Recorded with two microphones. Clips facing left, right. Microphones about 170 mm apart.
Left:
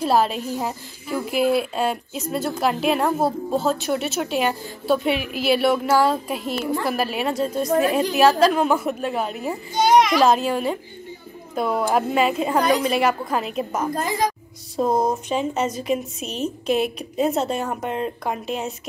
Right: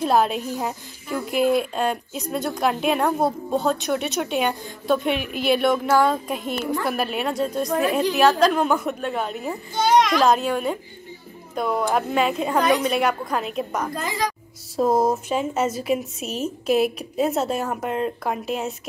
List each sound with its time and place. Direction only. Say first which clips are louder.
0.0 s a woman's voice: even; centre (ahead or behind)
9.8 s a child's voice: left 2 dB; 15° left (ahead or behind)
10.1 s a woman's voice: left 1 dB; centre (ahead or behind)